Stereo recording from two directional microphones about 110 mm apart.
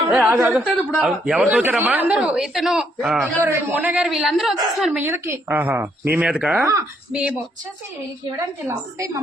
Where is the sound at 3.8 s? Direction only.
10° right (ahead or behind).